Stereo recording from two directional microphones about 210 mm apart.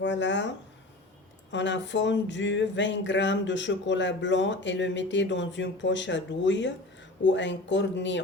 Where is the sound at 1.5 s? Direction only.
60° left (ahead or behind).